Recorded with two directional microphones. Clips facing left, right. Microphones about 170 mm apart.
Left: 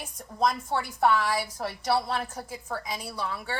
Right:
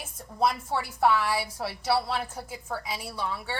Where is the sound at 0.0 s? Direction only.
5° right (ahead or behind).